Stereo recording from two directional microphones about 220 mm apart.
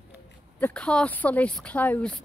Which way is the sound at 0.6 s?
5° left (ahead or behind).